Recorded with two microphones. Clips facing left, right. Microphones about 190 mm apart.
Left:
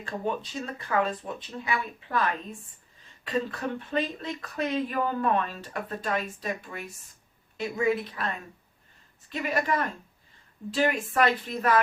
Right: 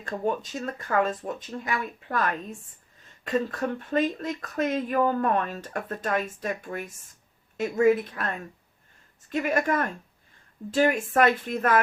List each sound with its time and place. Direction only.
0.0 s speech: 45° right (ahead or behind)
9.3 s speech: 45° right (ahead or behind)